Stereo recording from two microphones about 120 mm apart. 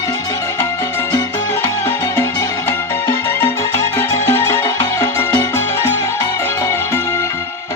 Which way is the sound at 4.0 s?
25° left (ahead or behind).